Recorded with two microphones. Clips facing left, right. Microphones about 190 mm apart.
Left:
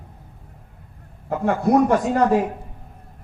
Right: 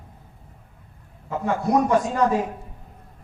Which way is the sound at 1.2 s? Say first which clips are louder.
Left 4 dB; 60° left (ahead or behind).